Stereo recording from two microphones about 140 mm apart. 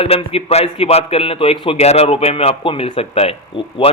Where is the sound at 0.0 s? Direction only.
45° left (ahead or behind).